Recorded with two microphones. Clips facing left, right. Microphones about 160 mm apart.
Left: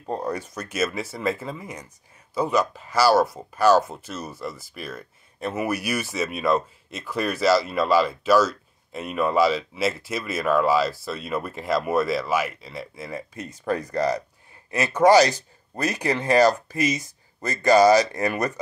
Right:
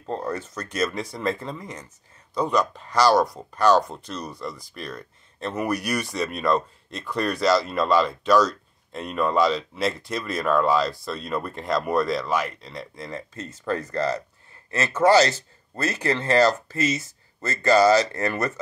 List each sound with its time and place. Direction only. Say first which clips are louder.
0.0 s speech: left 1 dB; 15° left (ahead or behind)